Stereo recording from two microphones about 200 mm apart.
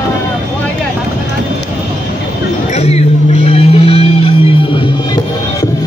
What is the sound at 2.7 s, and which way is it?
Music, 35° left (ahead or behind).